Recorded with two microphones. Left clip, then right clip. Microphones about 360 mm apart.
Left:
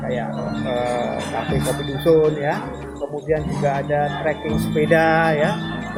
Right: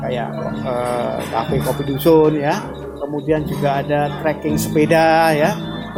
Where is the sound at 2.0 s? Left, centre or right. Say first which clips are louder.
Right 3 dB; right.